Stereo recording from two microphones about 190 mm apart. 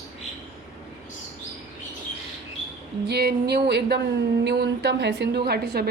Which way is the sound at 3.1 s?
55° right (ahead or behind).